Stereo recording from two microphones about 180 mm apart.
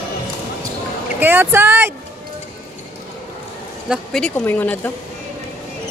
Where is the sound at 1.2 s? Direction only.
10° right (ahead or behind).